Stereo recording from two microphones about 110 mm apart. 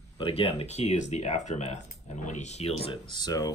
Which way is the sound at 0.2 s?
60° left (ahead or behind).